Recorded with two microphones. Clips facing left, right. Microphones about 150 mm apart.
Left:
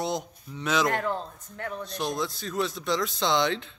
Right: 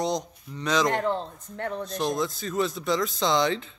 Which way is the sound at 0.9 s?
25° right (ahead or behind).